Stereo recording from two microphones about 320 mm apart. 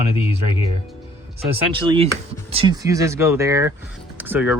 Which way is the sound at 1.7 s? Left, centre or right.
Centre.